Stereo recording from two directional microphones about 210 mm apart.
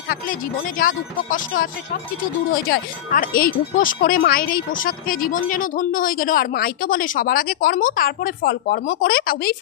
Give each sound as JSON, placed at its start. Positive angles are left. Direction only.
{"t": 0.8, "sound": "speech", "side_deg": 40}